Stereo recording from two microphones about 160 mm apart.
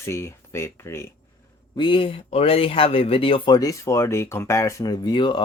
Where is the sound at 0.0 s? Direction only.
15° left (ahead or behind).